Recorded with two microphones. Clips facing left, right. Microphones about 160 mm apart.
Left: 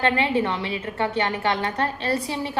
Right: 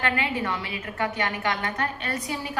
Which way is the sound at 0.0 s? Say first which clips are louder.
Left 5 dB; 30° left (ahead or behind).